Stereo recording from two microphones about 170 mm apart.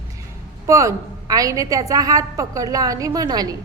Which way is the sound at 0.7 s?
20° right (ahead or behind).